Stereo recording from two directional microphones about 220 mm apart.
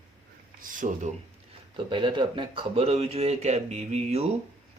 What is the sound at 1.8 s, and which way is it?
Speech, 20° right (ahead or behind).